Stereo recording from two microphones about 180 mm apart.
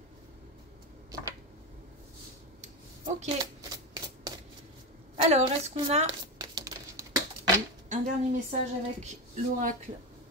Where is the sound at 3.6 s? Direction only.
20° right (ahead or behind).